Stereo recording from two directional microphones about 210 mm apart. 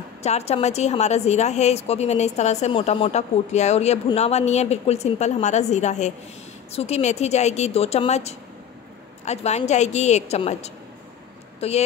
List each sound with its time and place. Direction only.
0.2 s a woman's voice: 30° left (ahead or behind)